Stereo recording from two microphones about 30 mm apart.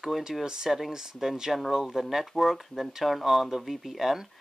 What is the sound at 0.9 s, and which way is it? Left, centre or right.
Speech, centre.